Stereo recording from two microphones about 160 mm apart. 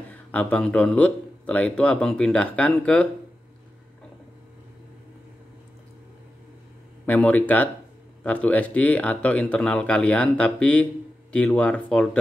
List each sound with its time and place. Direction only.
0.1 s speech: 10° left (ahead or behind)
7.1 s speech: 10° left (ahead or behind)